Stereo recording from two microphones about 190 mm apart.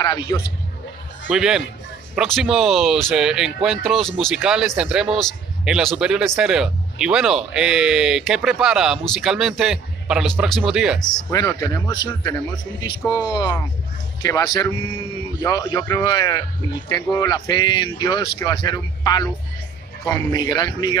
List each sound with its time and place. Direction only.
0.0 s a man's voice: 20° left (ahead or behind)
1.3 s speech: 5° right (ahead or behind)
11.3 s a man's voice: 15° left (ahead or behind)